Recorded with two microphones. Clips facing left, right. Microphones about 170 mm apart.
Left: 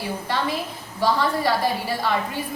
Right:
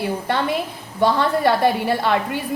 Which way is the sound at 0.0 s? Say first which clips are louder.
Right 4 dB; 60° right (ahead or behind).